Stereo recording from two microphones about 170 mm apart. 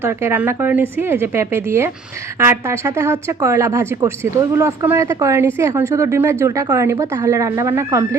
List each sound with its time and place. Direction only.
0.0 s a woman's voice: 15° right (ahead or behind)